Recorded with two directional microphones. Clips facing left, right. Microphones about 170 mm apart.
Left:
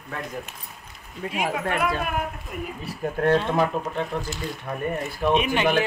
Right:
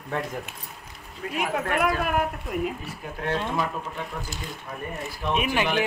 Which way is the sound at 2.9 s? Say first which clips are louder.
Left 8 dB; 45° left (ahead or behind).